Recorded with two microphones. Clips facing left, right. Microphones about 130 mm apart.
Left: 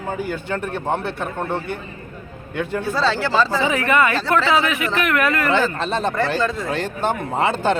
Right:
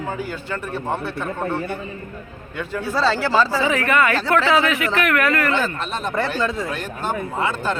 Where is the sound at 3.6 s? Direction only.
20° left (ahead or behind).